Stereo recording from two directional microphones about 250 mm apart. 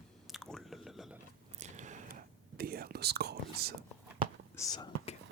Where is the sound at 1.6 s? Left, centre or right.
Right.